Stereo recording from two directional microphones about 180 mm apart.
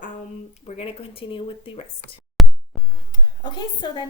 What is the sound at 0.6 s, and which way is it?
Speech, 35° left (ahead or behind).